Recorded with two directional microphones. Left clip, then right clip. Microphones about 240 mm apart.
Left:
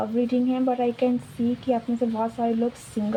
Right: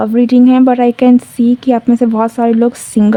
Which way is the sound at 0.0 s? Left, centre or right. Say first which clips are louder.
Right 14 dB; right.